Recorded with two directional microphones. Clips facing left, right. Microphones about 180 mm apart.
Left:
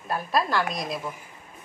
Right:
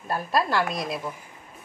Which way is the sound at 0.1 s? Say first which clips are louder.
Right 1 dB; centre (ahead or behind).